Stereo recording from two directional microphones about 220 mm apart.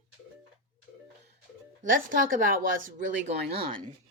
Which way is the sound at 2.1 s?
40° right (ahead or behind).